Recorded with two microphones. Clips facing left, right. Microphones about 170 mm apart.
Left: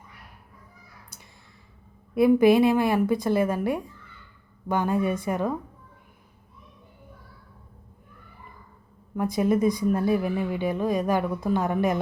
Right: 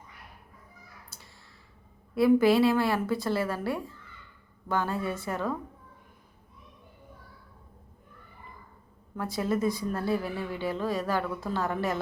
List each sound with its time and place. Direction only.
1.1 s a sound: 15° left (ahead or behind)
2.1 s speech: 20° left (ahead or behind)
9.1 s speech: 15° left (ahead or behind)